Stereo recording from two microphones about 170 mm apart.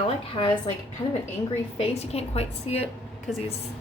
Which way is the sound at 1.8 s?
40° left (ahead or behind).